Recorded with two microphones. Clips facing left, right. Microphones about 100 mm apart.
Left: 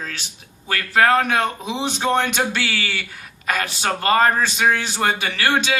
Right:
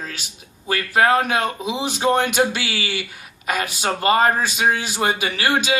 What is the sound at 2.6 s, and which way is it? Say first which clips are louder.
Speech: left 1 dB; 55° left (ahead or behind).